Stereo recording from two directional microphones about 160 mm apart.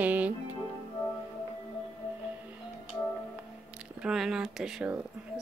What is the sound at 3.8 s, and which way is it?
Speech, 5° right (ahead or behind).